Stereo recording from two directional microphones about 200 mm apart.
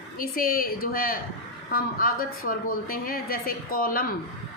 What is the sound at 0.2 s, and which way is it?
A woman's voice, 45° left (ahead or behind).